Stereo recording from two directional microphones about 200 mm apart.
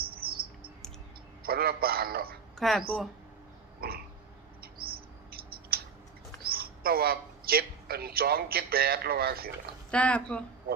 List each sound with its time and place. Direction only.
0.2 s bird: 50° right (ahead or behind)
1.4 s a man's voice: 50° right (ahead or behind)
2.6 s speech: centre (ahead or behind)
3.8 s a sound: 50° right (ahead or behind)
4.6 s mouse: 50° right (ahead or behind)
6.4 s a man's voice: 50° right (ahead or behind)
9.9 s speech: 5° left (ahead or behind)